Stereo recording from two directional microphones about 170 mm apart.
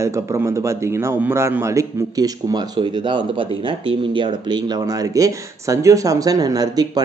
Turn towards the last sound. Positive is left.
turn(degrees=-25)  # may be behind; listen again after turning